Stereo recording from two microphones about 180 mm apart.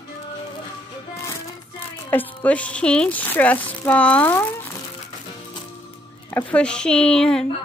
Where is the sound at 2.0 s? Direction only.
10° left (ahead or behind).